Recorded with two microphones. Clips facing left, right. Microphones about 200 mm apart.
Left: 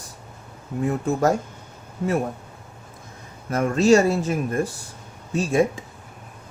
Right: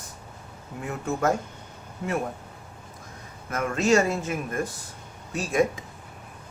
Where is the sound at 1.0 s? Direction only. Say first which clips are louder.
Left 3 dB; 35° left (ahead or behind).